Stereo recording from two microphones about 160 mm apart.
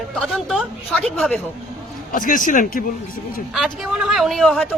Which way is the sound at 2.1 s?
55° left (ahead or behind).